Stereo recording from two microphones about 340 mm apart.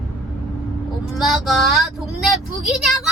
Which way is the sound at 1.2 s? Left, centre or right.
Centre.